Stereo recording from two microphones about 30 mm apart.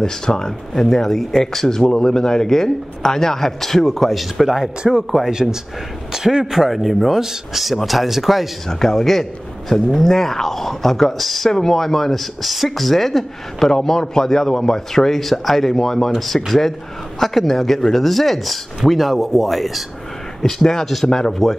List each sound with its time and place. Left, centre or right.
0.0 s speech: centre
5.2 s a man's voice: centre
7.1 s a man's voice: centre
7.5 s speech: centre
8.6 s a man's voice: centre